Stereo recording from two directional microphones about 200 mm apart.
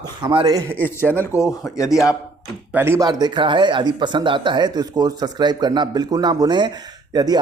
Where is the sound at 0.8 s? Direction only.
10° left (ahead or behind).